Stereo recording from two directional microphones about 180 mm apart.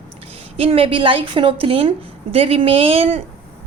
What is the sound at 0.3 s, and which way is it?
A woman's voice, 35° right (ahead or behind).